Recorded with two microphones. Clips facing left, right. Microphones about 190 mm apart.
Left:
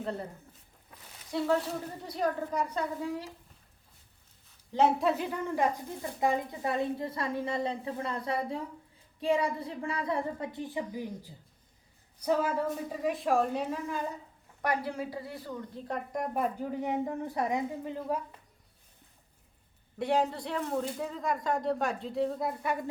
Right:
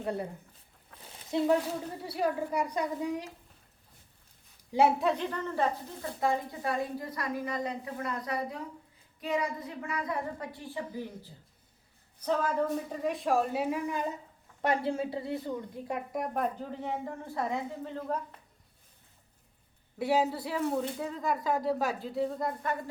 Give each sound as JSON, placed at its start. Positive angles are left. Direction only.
{"t": 0.0, "sound": "a woman's voice", "side_deg": -15}
{"t": 1.3, "sound": "a woman's voice", "side_deg": -20}
{"t": 4.7, "sound": "a woman's voice", "side_deg": -10}
{"t": 5.0, "sound": "a woman's voice", "side_deg": 5}
{"t": 10.8, "sound": "a woman's voice", "side_deg": 15}
{"t": 14.6, "sound": "speech", "side_deg": -25}
{"t": 15.4, "sound": "a woman's voice", "side_deg": -10}
{"t": 16.7, "sound": "a woman's voice", "side_deg": 15}
{"t": 20.0, "sound": "speech", "side_deg": -5}